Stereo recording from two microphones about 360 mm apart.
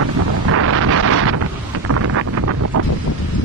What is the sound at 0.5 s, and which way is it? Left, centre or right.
Wind noise, right.